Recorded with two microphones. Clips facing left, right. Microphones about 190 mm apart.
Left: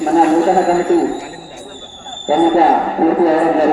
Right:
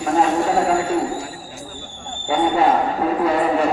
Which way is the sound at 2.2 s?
35° left (ahead or behind).